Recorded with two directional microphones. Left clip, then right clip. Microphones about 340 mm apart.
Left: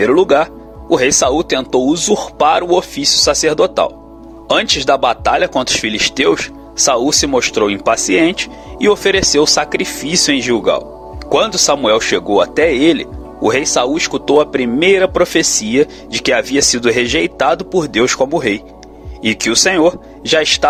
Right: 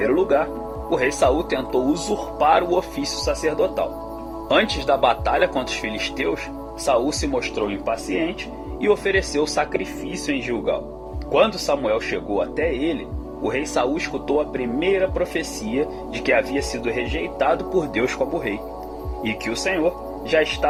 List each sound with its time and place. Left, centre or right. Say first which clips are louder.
0.2 s speech: left 8 dB; centre